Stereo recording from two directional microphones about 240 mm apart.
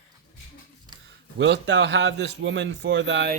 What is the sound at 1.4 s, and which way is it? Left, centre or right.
A man's voice, right.